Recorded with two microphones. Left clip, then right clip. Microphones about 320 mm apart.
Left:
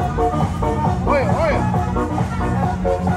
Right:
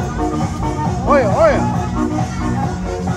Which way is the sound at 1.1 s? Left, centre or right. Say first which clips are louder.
Right 7 dB; right.